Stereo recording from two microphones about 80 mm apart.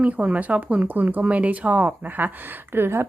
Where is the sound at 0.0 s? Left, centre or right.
Centre.